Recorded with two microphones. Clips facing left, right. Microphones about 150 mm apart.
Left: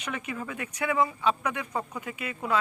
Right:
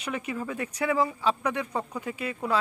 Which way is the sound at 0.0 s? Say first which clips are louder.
Right 3 dB; 35° right (ahead or behind).